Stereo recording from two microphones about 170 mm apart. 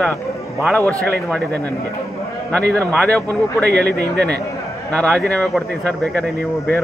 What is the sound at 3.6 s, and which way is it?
Speech, 75° right (ahead or behind).